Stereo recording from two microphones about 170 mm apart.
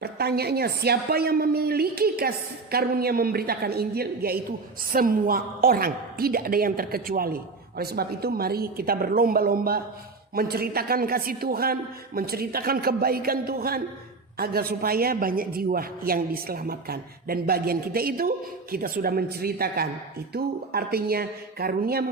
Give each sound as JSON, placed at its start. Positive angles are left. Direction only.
{"t": 0.0, "sound": "a woman's voice", "side_deg": -70}